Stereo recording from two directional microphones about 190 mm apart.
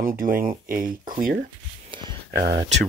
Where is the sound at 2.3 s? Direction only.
55° right (ahead or behind).